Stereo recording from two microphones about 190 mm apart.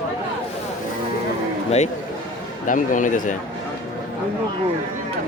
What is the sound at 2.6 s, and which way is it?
Speech, 45° left (ahead or behind).